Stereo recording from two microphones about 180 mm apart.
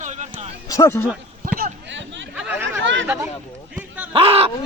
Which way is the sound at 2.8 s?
90° right.